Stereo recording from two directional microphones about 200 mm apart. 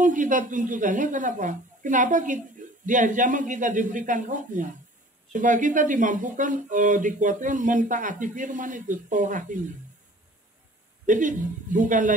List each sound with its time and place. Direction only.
0.0 s a woman's voice: 40° right (ahead or behind)
11.1 s a woman's voice: 40° right (ahead or behind)